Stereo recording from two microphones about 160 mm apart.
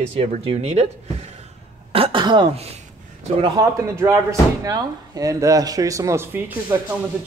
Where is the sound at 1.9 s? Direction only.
35° right (ahead or behind).